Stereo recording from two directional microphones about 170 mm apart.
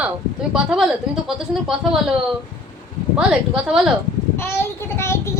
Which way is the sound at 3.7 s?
5° right (ahead or behind).